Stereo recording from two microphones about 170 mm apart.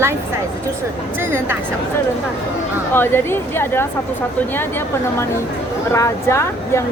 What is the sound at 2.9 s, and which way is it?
Speech, 15° left (ahead or behind).